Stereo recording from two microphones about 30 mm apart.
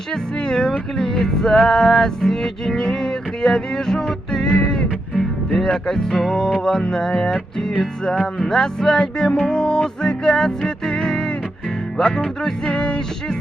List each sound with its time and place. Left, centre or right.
0.1 s music: centre
1.5 s music: left